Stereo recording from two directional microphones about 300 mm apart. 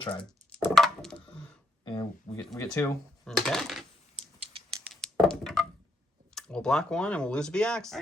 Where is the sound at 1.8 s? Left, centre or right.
Centre.